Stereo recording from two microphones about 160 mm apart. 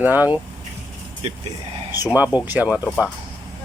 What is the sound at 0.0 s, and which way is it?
Speech, 10° right (ahead or behind).